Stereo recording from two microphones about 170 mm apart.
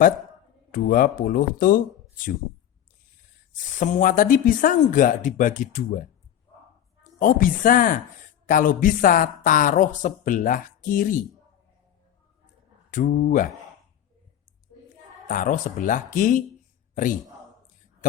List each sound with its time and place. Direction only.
0.7 s speech: 55° left (ahead or behind)
3.8 s speech: 50° left (ahead or behind)
7.2 s speech: 55° left (ahead or behind)
12.9 s speech: 50° left (ahead or behind)
15.3 s a man's voice: 50° left (ahead or behind)